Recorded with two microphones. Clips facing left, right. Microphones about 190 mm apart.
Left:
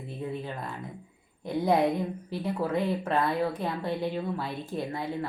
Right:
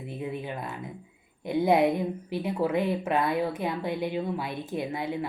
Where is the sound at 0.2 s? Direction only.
15° right (ahead or behind).